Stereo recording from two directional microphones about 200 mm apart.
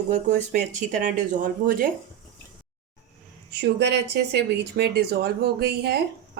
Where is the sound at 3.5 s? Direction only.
55° right (ahead or behind).